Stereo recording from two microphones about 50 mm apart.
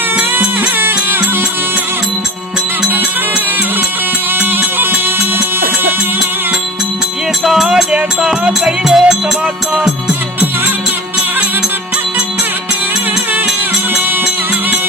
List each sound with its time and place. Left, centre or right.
0.2 s music: right
7.4 s music: centre